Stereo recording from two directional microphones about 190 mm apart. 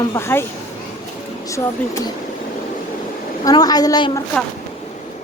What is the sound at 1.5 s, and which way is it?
Speech, 15° left (ahead or behind).